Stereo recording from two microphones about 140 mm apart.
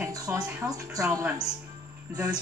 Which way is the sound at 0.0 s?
25° right (ahead or behind).